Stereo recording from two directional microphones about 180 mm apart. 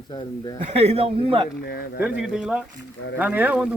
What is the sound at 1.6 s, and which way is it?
Speech, 60° left (ahead or behind).